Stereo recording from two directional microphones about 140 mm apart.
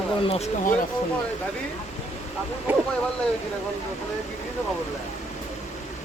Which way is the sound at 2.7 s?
15° right (ahead or behind).